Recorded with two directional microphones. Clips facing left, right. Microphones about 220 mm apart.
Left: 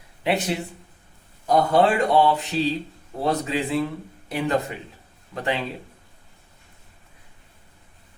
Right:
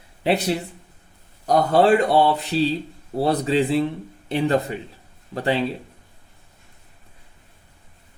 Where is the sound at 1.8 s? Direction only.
35° right (ahead or behind).